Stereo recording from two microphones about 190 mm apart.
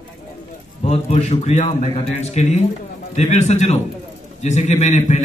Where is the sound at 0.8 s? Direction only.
35° left (ahead or behind).